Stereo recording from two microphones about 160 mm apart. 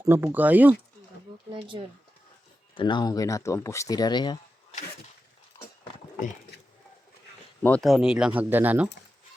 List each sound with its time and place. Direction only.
0.0 s speech: 15° right (ahead or behind)
1.5 s speech: 30° right (ahead or behind)
2.7 s speech: 30° left (ahead or behind)
6.5 s a sound: 90° left
7.6 s speech: 5° left (ahead or behind)